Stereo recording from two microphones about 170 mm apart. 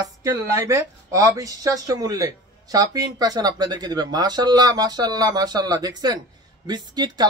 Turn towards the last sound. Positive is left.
turn(degrees=-25)  # may be behind; listen again after turning